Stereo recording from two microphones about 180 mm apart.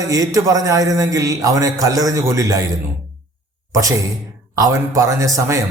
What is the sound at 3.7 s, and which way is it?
Speech, 20° right (ahead or behind).